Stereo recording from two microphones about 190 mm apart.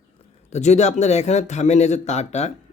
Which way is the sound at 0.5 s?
35° left (ahead or behind).